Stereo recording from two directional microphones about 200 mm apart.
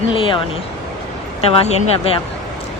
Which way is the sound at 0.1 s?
25° left (ahead or behind).